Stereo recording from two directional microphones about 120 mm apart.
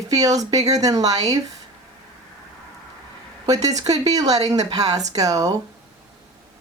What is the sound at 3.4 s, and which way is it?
A woman's voice, 30° right (ahead or behind).